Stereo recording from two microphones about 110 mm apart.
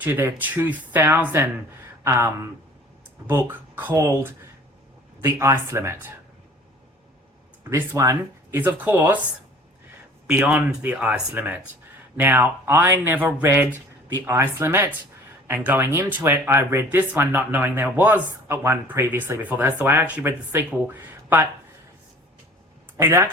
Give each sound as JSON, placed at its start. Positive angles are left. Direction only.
{"t": 0.0, "sound": "speech", "side_deg": -20}
{"t": 7.7, "sound": "speech", "side_deg": -30}
{"t": 10.3, "sound": "speech", "side_deg": -15}
{"t": 23.0, "sound": "speech", "side_deg": -25}